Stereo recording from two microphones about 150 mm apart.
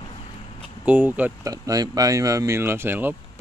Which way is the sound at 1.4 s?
25° right (ahead or behind).